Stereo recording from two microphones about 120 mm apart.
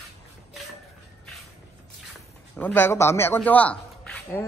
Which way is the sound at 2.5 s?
15° left (ahead or behind).